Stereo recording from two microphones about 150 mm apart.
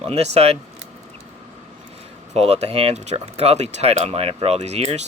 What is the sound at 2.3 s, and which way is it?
Speech, 45° right (ahead or behind).